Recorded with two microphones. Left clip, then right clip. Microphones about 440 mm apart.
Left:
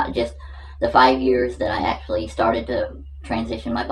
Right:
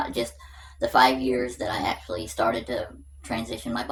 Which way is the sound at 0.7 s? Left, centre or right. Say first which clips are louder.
Left 5 dB; right.